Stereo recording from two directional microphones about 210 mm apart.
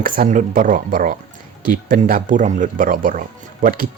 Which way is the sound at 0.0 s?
40° right (ahead or behind).